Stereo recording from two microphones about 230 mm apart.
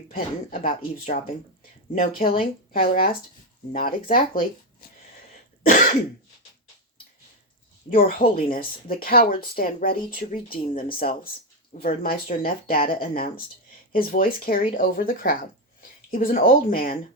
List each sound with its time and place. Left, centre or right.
0.1 s speech: left
4.8 s a sound: left
7.9 s speech: left